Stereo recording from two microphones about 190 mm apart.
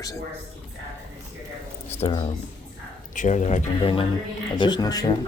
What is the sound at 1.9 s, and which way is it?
Speech, 25° left (ahead or behind).